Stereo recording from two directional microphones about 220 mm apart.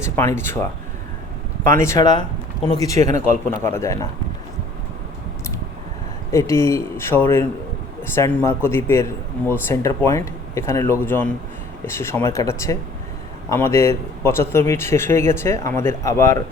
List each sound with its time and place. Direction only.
0.0 s a man's voice: 10° left (ahead or behind)
3.0 s a man's voice: 30° right (ahead or behind)
3.6 s a man's voice: 10° left (ahead or behind)
6.3 s a man's voice: 15° left (ahead or behind)